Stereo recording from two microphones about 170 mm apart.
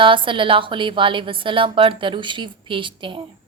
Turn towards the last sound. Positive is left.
turn(degrees=-30)  # may be behind; listen again after turning